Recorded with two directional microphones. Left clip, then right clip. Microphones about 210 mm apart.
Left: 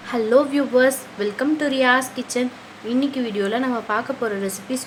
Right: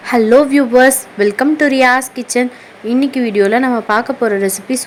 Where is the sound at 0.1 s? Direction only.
30° right (ahead or behind).